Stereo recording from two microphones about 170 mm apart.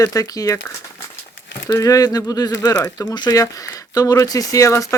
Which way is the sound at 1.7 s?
20° left (ahead or behind).